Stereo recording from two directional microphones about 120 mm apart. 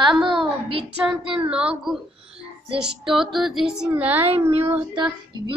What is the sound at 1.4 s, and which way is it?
A woman's voice, 10° right (ahead or behind).